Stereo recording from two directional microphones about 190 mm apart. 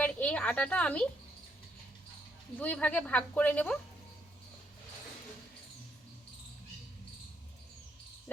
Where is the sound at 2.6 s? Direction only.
5° left (ahead or behind).